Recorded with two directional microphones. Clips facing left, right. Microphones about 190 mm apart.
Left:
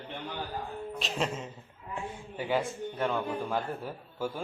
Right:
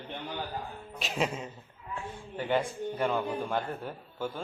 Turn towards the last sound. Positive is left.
turn(degrees=5)  # may be behind; listen again after turning